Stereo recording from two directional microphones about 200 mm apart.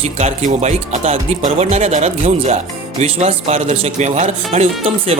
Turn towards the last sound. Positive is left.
turn(degrees=-30)  # may be behind; listen again after turning